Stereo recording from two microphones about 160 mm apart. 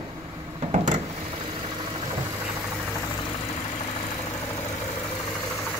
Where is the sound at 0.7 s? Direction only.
45° right (ahead or behind).